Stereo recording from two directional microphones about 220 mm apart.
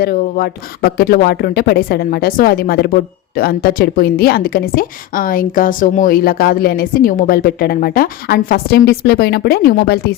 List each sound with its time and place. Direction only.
0.0 s speech: 40° left (ahead or behind)